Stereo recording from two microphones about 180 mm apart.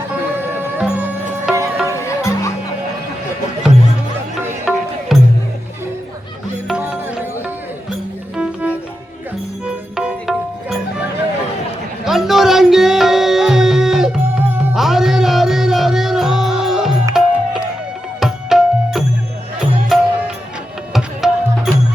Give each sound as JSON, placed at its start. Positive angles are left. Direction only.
{"t": 0.3, "sound": "music", "side_deg": -10}
{"t": 2.0, "sound": "music", "side_deg": 15}
{"t": 4.7, "sound": "music", "side_deg": 0}
{"t": 6.7, "sound": "music", "side_deg": -5}
{"t": 8.4, "sound": "music", "side_deg": -5}
{"t": 12.0, "sound": "music", "side_deg": 0}
{"t": 14.8, "sound": "music", "side_deg": 0}